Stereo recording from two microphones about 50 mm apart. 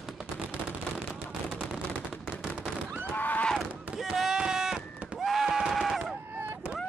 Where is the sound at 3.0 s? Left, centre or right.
Left.